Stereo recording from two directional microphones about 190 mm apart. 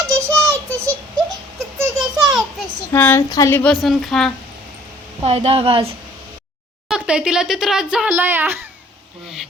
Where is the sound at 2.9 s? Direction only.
10° left (ahead or behind).